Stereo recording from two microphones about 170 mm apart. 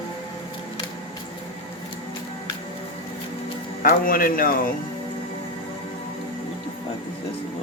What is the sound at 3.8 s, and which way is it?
Speech, 60° left (ahead or behind).